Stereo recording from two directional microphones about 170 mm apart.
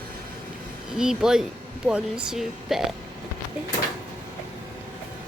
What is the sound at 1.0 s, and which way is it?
Speech, 5° right (ahead or behind).